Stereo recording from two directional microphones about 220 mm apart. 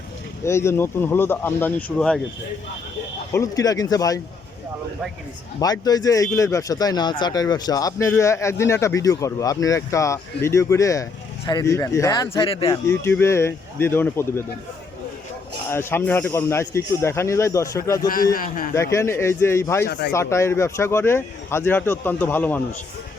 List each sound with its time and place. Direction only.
0.4 s speech: 10° left (ahead or behind)
3.3 s speech: 15° left (ahead or behind)
5.5 s speech: 15° left (ahead or behind)
12.9 s speech: 10° left (ahead or behind)
15.7 s speech: 10° left (ahead or behind)
18.1 s a man's voice: 40° left (ahead or behind)
18.7 s speech: 15° left (ahead or behind)